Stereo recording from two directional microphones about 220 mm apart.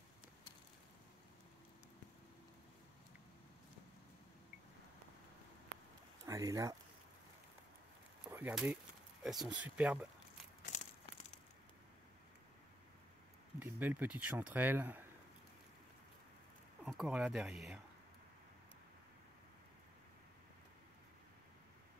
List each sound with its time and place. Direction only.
6.2 s speech: 15° right (ahead or behind)
8.3 s speech: 10° right (ahead or behind)
10.7 s a sound: 35° left (ahead or behind)
13.6 s speech: 10° right (ahead or behind)
16.8 s speech: 5° right (ahead or behind)